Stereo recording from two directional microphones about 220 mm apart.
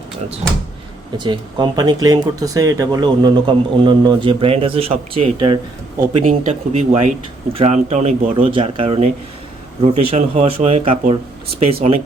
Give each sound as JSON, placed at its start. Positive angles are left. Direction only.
{"t": 1.2, "sound": "speech", "side_deg": -20}